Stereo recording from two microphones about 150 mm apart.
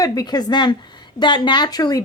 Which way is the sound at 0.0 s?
25° left (ahead or behind).